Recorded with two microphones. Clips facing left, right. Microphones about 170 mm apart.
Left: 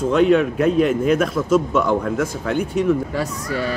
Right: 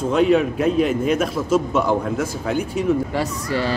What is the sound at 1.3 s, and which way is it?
Speech, 30° right (ahead or behind).